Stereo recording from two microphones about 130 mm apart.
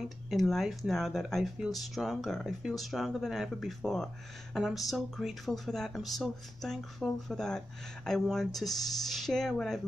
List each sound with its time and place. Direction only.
0.3 s speech: centre (ahead or behind)